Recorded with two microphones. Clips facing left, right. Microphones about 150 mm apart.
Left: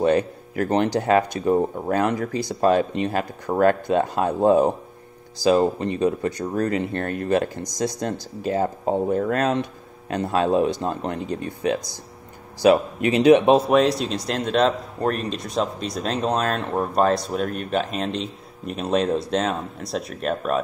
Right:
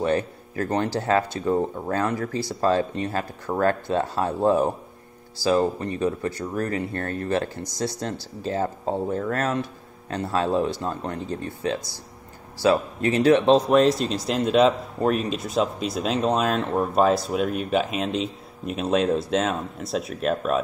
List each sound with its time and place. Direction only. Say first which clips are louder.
0.0 s speech: left 4 dB; 15° left (ahead or behind); by 20.6 s centre (ahead or behind)